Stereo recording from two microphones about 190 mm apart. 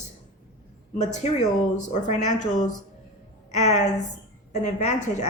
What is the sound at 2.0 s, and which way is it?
Speech, 40° left (ahead or behind).